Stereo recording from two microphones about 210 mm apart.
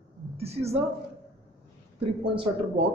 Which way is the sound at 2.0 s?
30° right (ahead or behind).